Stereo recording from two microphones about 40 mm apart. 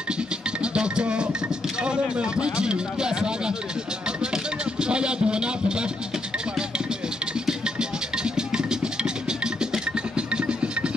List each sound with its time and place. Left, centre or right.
0.7 s music: right
1.9 s speech: right
4.7 s speech: right